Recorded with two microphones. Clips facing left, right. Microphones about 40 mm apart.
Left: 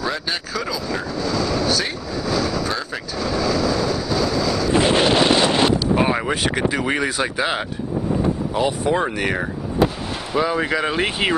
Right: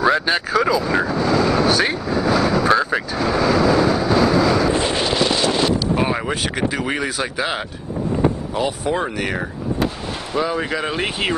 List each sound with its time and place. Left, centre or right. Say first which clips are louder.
0.0 s vehicle: right 8 dB; right
4.8 s wind noise: left 3 dB; left
5.9 s speech: left 1 dB; centre